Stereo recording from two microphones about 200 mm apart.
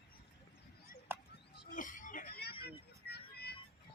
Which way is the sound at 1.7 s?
40° left (ahead or behind).